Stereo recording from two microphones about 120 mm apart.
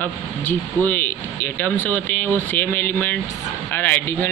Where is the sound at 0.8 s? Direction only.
15° left (ahead or behind).